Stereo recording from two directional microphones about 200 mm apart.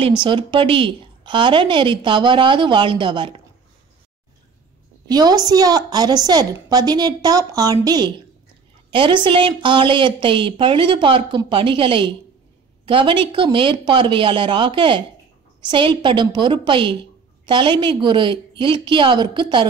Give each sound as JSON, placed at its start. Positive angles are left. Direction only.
{"t": 0.2, "sound": "a woman's voice", "side_deg": -25}
{"t": 5.0, "sound": "a woman's voice", "side_deg": -20}